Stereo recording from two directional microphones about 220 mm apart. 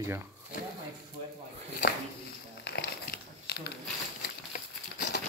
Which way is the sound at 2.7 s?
45° left (ahead or behind).